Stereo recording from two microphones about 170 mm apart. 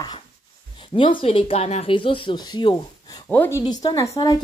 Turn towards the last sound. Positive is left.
turn(degrees=20)  # may be behind; listen again after turning